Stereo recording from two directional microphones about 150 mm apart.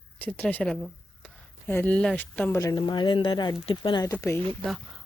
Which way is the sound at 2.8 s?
30° left (ahead or behind).